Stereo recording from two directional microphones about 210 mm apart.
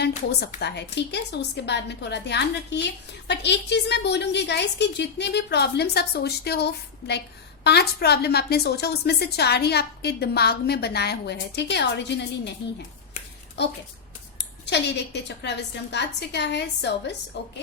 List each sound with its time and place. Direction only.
0.3 s a woman's voice: 50° left (ahead or behind)
13.6 s a woman's voice: 55° left (ahead or behind)